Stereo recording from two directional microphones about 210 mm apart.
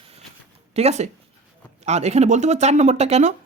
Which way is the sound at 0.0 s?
25° right (ahead or behind).